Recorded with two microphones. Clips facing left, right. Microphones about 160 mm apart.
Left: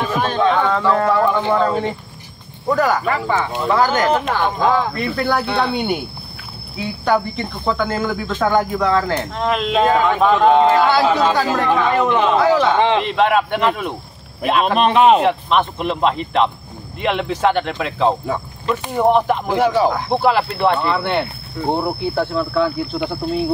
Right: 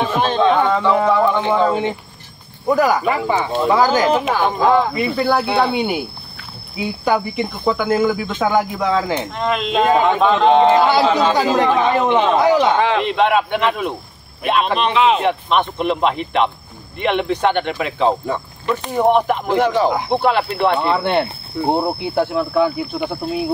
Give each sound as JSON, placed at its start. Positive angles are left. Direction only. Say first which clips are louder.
{"t": 0.4, "sound": "speech", "louder": "right 1 dB", "side_deg": 0}
{"t": 9.8, "sound": "a man's voice", "louder": "right 1 dB", "side_deg": -20}
{"t": 12.7, "sound": "speech", "louder": "left 1 dB", "side_deg": 25}
{"t": 13.0, "sound": "speech", "louder": "even", "side_deg": 0}
{"t": 14.8, "sound": "speech", "louder": "left 5 dB", "side_deg": 50}
{"t": 15.1, "sound": "speech", "louder": "left 1 dB", "side_deg": 0}
{"t": 20.9, "sound": "speech", "louder": "right 2 dB", "side_deg": -20}
{"t": 22.9, "sound": "speech", "louder": "left 1 dB", "side_deg": -5}